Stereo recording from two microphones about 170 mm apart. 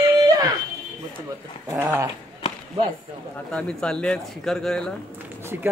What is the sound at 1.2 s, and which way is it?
Speech, 15° right (ahead or behind).